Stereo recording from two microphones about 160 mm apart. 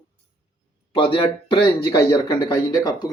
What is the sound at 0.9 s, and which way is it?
A man's voice, 30° left (ahead or behind).